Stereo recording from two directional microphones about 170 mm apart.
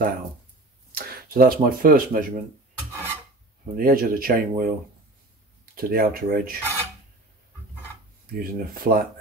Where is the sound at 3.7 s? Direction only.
60° right (ahead or behind).